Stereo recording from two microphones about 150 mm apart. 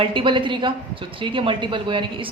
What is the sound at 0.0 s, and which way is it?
A woman's voice, 35° right (ahead or behind).